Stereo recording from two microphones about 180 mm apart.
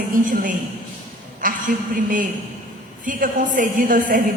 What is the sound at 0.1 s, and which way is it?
A woman's voice, 45° right (ahead or behind).